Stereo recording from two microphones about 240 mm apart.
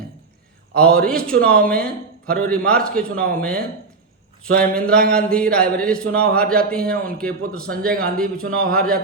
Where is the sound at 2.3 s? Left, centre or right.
Centre.